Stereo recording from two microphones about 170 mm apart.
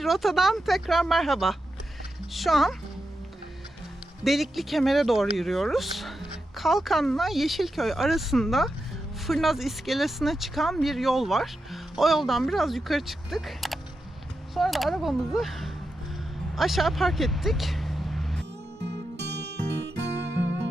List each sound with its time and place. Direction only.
0.0 s speech: centre (ahead or behind)
4.2 s speech: centre (ahead or behind)
19.1 s music: 90° right